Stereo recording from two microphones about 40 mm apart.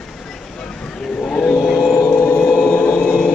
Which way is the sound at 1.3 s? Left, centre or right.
Left.